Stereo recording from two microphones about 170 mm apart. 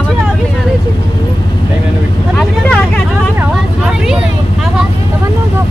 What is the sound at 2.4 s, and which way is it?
Vehicle, 10° left (ahead or behind).